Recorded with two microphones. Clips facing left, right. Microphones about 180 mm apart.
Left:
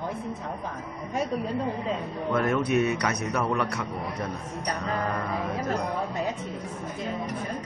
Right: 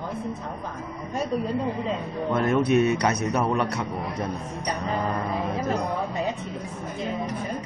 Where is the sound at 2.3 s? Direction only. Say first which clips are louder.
Right 3 dB; 25° right (ahead or behind).